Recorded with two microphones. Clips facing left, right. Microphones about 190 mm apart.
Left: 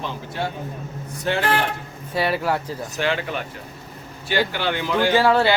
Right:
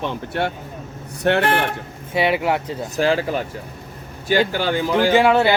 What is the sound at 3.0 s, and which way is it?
Speech, 35° right (ahead or behind).